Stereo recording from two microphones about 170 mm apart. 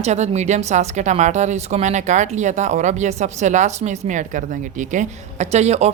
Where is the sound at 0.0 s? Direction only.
40° right (ahead or behind).